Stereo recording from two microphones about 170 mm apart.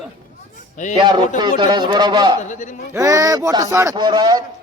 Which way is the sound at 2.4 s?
45° left (ahead or behind).